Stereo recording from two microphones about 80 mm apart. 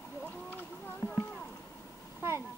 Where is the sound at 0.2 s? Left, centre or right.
Left.